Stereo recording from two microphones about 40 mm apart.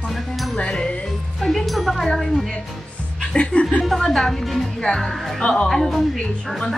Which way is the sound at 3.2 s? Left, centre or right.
Left.